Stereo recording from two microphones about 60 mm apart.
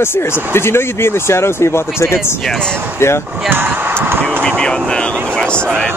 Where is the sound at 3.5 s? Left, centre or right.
Right.